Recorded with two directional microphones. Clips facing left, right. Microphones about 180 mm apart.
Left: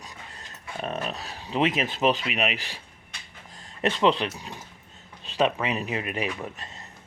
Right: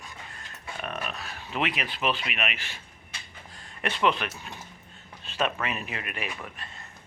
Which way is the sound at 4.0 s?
35° left (ahead or behind).